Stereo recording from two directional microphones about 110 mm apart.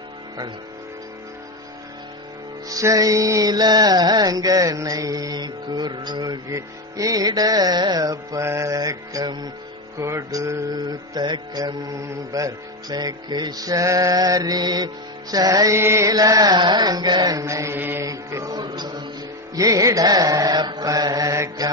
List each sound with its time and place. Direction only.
2.7 s music: 30° right (ahead or behind)
9.9 s music: 25° right (ahead or behind)
10.8 s music: 40° right (ahead or behind)
17.7 s mantra: 20° right (ahead or behind)
18.0 s music: 30° right (ahead or behind)